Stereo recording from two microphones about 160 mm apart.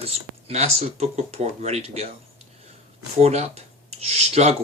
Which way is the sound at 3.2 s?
45° right (ahead or behind).